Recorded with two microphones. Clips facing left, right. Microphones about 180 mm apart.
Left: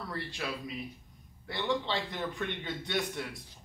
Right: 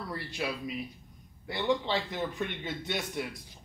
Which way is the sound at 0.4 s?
20° right (ahead or behind).